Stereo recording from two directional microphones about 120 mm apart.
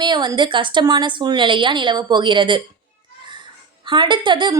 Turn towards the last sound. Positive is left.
turn(degrees=-40)  # may be behind; listen again after turning